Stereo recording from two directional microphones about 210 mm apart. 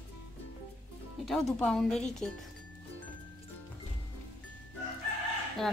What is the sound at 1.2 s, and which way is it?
A woman's voice, centre (ahead or behind).